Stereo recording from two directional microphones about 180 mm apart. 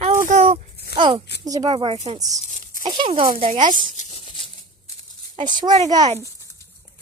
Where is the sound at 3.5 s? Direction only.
45° right (ahead or behind).